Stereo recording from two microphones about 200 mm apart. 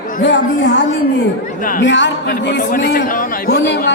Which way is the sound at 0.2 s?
60° left (ahead or behind).